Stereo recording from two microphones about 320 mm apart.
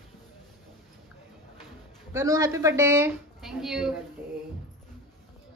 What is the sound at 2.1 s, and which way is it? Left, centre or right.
A woman's voice, centre.